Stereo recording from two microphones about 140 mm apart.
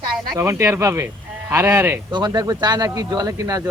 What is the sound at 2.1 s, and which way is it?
Speech, 30° right (ahead or behind).